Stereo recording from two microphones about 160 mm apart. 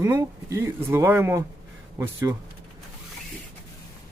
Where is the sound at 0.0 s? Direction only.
20° right (ahead or behind).